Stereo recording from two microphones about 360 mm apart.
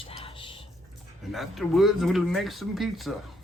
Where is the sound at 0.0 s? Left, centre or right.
Centre.